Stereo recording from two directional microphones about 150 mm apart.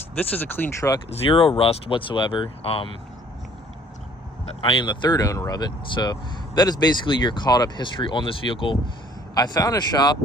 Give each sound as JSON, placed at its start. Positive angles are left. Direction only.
{"t": 0.2, "sound": "speech", "side_deg": 10}
{"t": 1.1, "sound": "speech", "side_deg": 40}
{"t": 4.6, "sound": "speech", "side_deg": 30}